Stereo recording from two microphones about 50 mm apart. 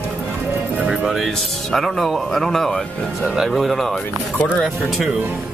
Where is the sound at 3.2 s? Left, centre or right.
Centre.